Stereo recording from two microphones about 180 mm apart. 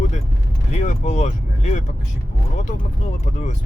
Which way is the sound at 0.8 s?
40° left (ahead or behind).